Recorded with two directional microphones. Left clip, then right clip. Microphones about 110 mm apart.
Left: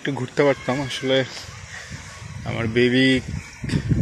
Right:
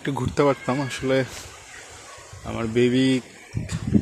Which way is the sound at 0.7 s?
45° right (ahead or behind).